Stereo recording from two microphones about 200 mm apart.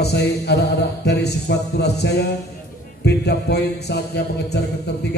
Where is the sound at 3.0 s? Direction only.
55° left (ahead or behind).